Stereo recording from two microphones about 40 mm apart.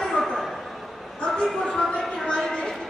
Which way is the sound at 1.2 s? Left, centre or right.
Centre.